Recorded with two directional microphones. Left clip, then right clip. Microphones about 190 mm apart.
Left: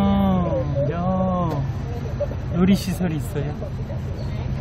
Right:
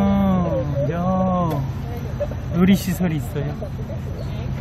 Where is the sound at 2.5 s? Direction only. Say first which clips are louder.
Right 2 dB; 5° right (ahead or behind).